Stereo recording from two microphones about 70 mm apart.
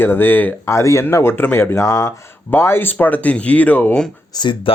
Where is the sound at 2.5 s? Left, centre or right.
Left.